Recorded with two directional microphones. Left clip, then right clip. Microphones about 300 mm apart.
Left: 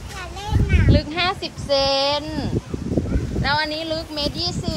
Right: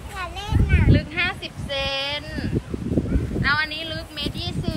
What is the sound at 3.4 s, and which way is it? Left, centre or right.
Speech, centre.